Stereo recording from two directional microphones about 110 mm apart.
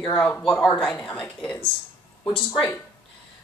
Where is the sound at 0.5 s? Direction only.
10° left (ahead or behind).